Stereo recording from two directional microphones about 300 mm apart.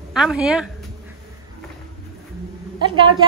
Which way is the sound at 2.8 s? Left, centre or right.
Centre.